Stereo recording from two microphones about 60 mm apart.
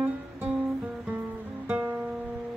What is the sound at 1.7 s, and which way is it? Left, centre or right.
Music, right.